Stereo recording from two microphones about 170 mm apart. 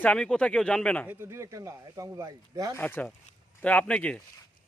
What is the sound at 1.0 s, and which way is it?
Speech, 15° right (ahead or behind).